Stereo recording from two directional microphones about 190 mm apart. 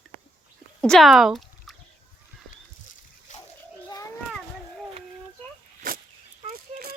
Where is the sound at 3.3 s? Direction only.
40° left (ahead or behind).